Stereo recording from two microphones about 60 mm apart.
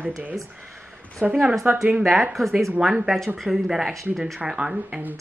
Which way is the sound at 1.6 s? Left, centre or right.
Right.